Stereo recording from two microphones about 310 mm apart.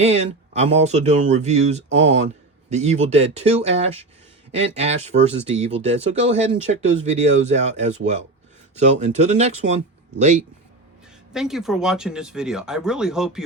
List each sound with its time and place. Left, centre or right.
0.0 s speech: right
11.3 s speech: centre